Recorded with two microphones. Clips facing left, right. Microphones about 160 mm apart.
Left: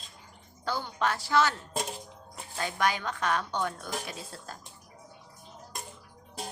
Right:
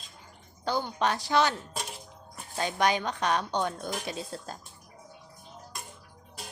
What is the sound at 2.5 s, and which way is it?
A woman's voice, 20° right (ahead or behind).